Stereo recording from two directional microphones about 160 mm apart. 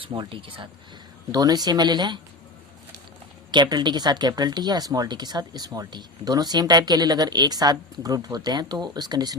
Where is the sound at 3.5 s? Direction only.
30° right (ahead or behind).